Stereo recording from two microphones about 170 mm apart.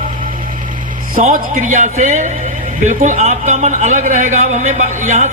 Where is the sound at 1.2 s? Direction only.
50° right (ahead or behind).